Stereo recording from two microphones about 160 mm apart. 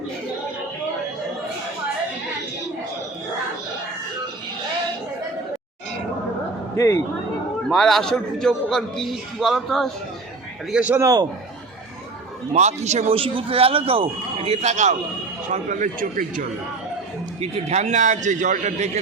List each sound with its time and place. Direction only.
6.7 s speech: 20° left (ahead or behind)
7.7 s a man's voice: centre (ahead or behind); by 11.3 s 20° right (ahead or behind)
12.5 s a man's voice: 45° right (ahead or behind)
17.4 s a man's voice: 40° right (ahead or behind)